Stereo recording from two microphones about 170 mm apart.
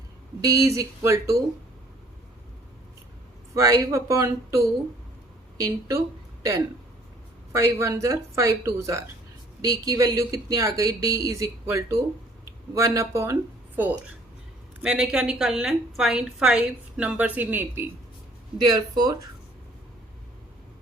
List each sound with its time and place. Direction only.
0.4 s speech: 20° right (ahead or behind)
3.5 s speech: 20° right (ahead or behind)
7.5 s a woman's voice: 15° right (ahead or behind)
18.6 s speech: 25° right (ahead or behind)